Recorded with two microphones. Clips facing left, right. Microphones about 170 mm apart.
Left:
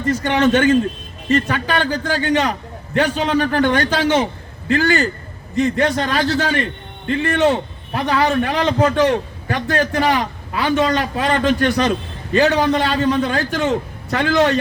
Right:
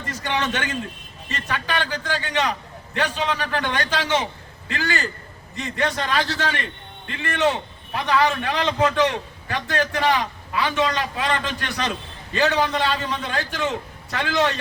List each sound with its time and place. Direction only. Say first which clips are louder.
0.1 s a man's voice: left 10 dB; 45° left (ahead or behind)